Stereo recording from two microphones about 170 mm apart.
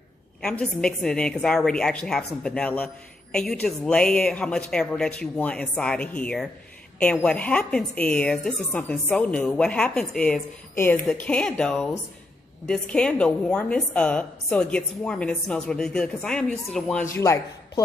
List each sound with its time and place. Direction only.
0.4 s a woman's voice: 5° left (ahead or behind)
17.1 s speech: 20° left (ahead or behind)